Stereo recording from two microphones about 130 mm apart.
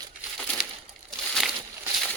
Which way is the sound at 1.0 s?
5° left (ahead or behind).